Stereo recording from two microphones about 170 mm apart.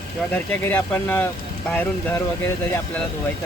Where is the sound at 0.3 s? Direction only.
10° left (ahead or behind).